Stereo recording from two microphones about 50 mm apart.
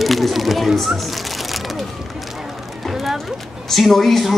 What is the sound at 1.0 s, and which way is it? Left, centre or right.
Music, centre.